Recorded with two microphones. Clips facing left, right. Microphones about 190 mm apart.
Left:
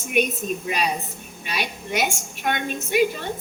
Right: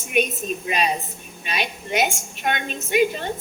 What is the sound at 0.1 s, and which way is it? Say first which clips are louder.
A woman's voice: even; 20° right (ahead or behind).